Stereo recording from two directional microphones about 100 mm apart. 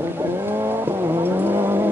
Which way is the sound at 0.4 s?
25° right (ahead or behind).